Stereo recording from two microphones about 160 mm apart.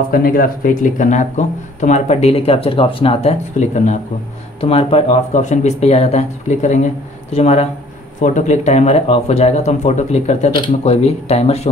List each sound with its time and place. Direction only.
0.1 s speech: 60° left (ahead or behind)
4.6 s speech: 35° left (ahead or behind)